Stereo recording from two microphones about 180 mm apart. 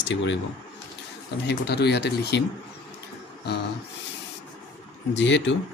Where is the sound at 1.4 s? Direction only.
65° left (ahead or behind).